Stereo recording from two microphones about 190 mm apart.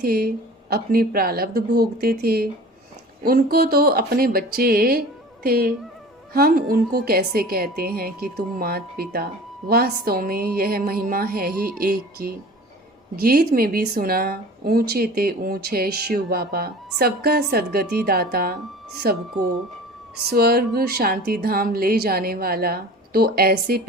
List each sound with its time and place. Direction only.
0.0 s a woman's voice: 50° right (ahead or behind)
20.3 s a woman's voice: 55° right (ahead or behind)